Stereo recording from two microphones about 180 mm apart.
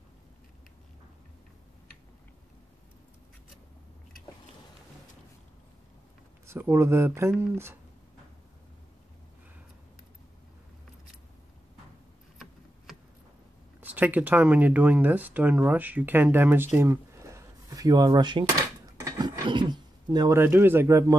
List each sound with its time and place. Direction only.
6.4 s speech: 15° right (ahead or behind)
13.7 s speech: 10° right (ahead or behind)